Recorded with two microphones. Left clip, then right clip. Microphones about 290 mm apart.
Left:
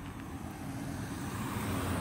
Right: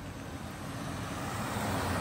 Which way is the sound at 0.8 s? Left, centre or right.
Centre.